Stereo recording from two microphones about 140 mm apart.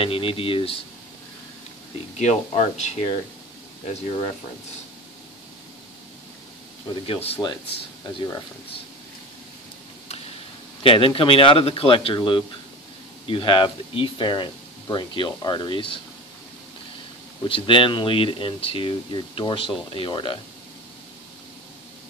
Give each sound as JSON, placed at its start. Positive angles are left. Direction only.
{"t": 0.0, "sound": "speech", "side_deg": 40}
{"t": 2.1, "sound": "speech", "side_deg": 55}
{"t": 7.1, "sound": "speech", "side_deg": 45}
{"t": 10.8, "sound": "speech", "side_deg": 40}
{"t": 17.5, "sound": "speech", "side_deg": 40}